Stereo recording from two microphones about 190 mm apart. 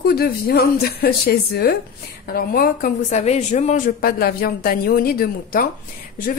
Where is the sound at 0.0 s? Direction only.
55° left (ahead or behind).